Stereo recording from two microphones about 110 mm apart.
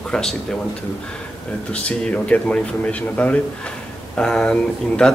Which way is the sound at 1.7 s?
10° left (ahead or behind).